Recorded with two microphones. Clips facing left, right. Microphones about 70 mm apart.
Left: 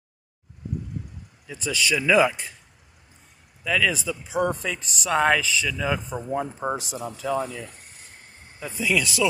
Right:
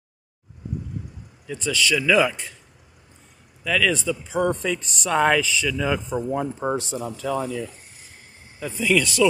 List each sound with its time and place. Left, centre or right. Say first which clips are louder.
1.5 s a man's voice: right 2 dB; centre
3.6 s speech: right 2 dB; centre